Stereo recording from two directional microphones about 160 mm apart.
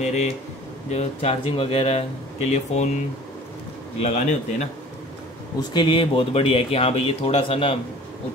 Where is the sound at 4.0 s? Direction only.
45° left (ahead or behind).